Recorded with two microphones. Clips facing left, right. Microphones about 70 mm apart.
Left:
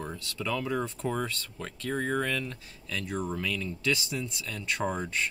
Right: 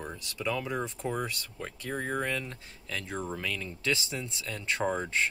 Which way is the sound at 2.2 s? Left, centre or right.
Right.